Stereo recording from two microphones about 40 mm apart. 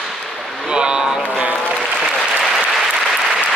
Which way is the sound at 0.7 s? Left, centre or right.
Right.